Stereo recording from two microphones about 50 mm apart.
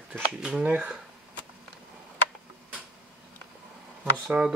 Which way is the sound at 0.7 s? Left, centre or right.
Centre.